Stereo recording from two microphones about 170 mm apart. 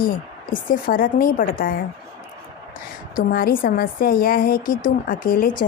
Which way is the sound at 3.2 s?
60° left (ahead or behind).